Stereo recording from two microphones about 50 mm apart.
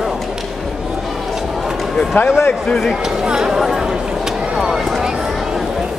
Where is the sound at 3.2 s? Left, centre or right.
Centre.